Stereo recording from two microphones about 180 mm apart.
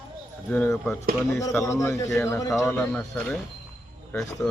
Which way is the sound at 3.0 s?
5° left (ahead or behind).